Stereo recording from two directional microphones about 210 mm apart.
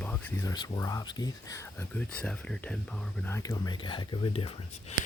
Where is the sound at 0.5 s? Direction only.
20° left (ahead or behind).